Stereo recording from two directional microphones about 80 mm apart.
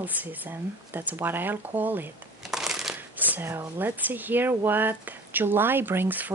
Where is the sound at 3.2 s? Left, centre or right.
Right.